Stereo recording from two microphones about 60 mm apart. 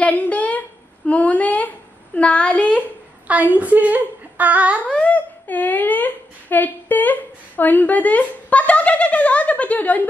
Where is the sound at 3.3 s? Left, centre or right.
Right.